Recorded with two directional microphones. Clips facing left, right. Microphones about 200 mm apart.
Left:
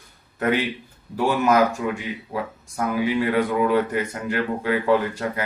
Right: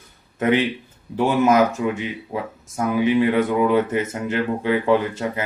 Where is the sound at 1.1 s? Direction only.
20° right (ahead or behind).